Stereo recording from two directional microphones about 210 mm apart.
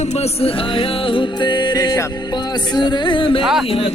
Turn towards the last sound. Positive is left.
turn(degrees=25)  # may be behind; listen again after turning